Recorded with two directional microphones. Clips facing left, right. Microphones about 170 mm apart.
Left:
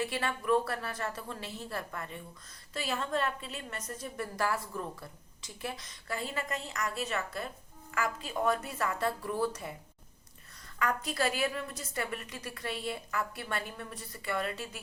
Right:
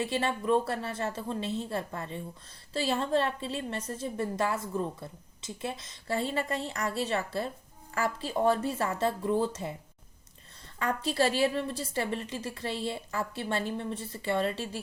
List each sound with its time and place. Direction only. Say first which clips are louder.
0.0 s a woman's voice: right 4 dB; 25° right (ahead or behind)
10.8 s a woman's voice: right 4 dB; 30° right (ahead or behind)